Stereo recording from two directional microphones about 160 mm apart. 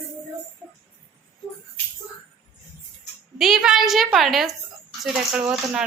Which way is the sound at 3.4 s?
Centre (ahead or behind).